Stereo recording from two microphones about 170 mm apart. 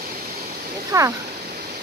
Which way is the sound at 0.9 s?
20° right (ahead or behind).